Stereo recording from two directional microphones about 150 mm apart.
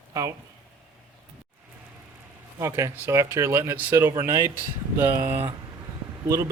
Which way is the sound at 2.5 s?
20° right (ahead or behind).